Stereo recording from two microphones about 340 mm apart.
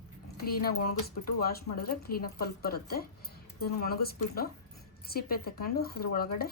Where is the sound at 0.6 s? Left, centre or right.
Left.